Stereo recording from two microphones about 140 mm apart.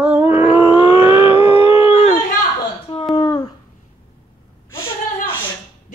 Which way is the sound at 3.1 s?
30° left (ahead or behind).